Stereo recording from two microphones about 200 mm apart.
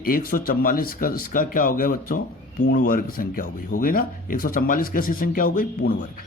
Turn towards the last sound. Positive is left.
turn(degrees=45)  # may be behind; listen again after turning